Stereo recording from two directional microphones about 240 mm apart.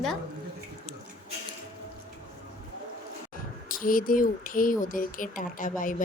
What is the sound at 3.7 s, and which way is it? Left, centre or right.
Speech, left.